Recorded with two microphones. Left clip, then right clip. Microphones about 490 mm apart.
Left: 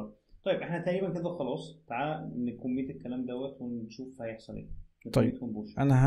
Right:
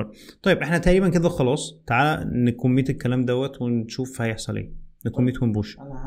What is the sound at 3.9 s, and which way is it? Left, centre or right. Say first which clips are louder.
Speech: right 12 dB; right.